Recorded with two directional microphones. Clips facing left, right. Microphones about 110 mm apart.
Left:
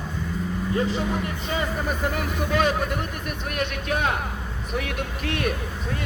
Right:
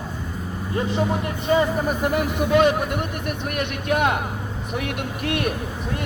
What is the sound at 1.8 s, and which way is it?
Speech, 10° right (ahead or behind).